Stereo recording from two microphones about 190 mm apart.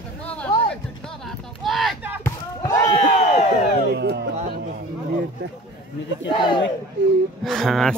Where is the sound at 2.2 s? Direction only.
20° left (ahead or behind).